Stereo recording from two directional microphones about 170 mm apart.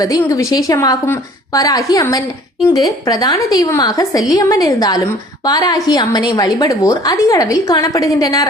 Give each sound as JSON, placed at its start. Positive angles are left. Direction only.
{"t": 0.0, "sound": "a woman's voice", "side_deg": 20}